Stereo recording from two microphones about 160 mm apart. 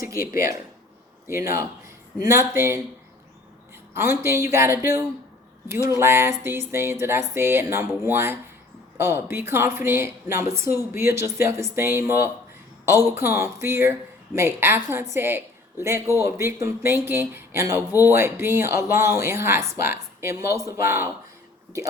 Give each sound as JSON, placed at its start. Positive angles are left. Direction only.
{"t": 1.3, "sound": "speech", "side_deg": -15}
{"t": 3.9, "sound": "speech", "side_deg": -15}